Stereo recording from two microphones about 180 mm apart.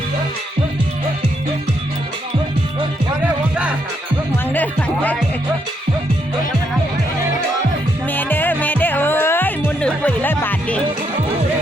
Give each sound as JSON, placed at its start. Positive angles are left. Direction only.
{"t": 4.5, "sound": "music", "side_deg": 10}
{"t": 8.1, "sound": "music", "side_deg": 10}